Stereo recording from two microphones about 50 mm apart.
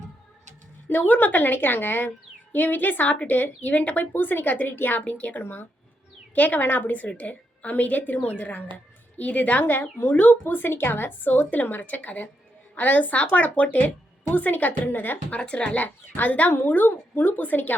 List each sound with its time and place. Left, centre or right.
0.9 s speech: left
4.9 s speech: left
5.4 s a woman's voice: left
6.3 s a woman's voice: left
15.4 s speech: left
16.0 s speech: left